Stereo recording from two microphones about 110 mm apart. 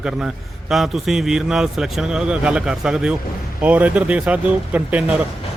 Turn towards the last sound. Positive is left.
turn(degrees=-10)  # may be behind; listen again after turning